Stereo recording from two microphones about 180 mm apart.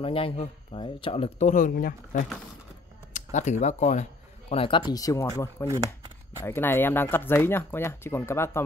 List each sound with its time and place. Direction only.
0.0 s speech: 30° left (ahead or behind)
4.9 s speech: 20° left (ahead or behind)